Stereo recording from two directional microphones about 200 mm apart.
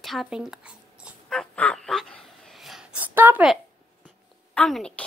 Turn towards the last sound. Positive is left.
turn(degrees=5)  # may be behind; listen again after turning